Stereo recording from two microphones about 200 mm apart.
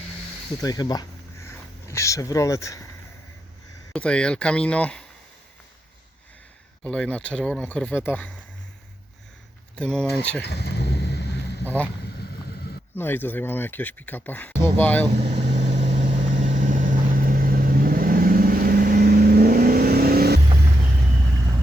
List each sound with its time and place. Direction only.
0.6 s a sound: 20° left (ahead or behind)
3.9 s speech: 5° left (ahead or behind)
6.8 s speech: 5° left (ahead or behind)
9.7 s speech: 5° left (ahead or behind)
10.4 s vehicle: 55° left (ahead or behind)
12.5 s a sound: 50° left (ahead or behind)
13.0 s speech: 10° left (ahead or behind)
15.1 s vehicle: 35° right (ahead or behind); by 20.4 s 50° right (ahead or behind)